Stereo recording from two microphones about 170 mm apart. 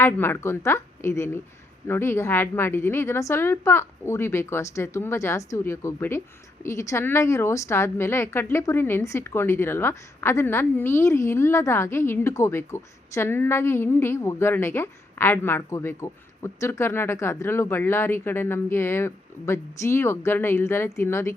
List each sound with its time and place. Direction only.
0.0 s a woman's voice: 15° left (ahead or behind)